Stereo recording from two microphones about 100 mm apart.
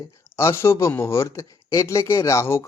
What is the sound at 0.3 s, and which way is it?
Speech, 25° left (ahead or behind).